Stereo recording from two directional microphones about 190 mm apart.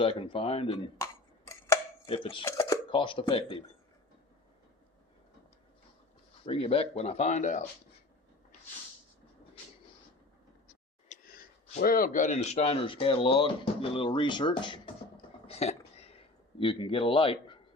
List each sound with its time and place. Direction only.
0.0 s speech: 25° left (ahead or behind)
0.9 s a sound: 15° left (ahead or behind)
2.0 s speech: 30° left (ahead or behind)
2.4 s speech: 15° left (ahead or behind)
2.9 s speech: 25° left (ahead or behind)
6.4 s speech: 30° left (ahead or behind)
11.1 s a sound: 50° left (ahead or behind)
11.8 s speech: 50° left (ahead or behind); by 14.8 s 25° left (ahead or behind)
15.4 s a sound: 35° left (ahead or behind)